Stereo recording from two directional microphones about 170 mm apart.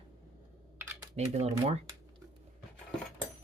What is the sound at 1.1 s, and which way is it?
Speech, 40° right (ahead or behind).